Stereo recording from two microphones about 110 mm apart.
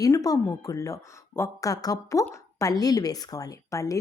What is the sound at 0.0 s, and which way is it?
A woman's voice, 30° left (ahead or behind).